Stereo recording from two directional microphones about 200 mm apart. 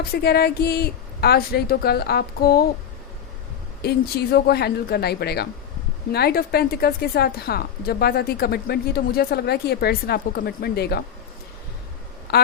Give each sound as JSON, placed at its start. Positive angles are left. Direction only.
{"t": 0.0, "sound": "a woman's voice", "side_deg": 50}
{"t": 3.8, "sound": "a woman's voice", "side_deg": 50}
{"t": 12.3, "sound": "speech", "side_deg": 50}